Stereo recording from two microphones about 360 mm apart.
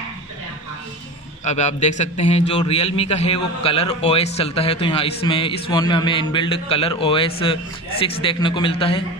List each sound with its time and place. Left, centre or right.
1.4 s a man's voice: centre